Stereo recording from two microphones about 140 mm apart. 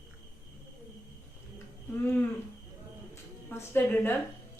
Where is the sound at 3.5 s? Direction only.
15° left (ahead or behind).